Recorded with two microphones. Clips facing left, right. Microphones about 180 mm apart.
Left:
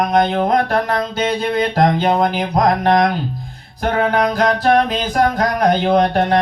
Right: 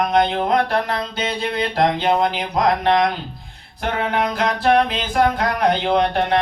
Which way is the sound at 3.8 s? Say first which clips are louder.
Left 5 dB; 40° left (ahead or behind).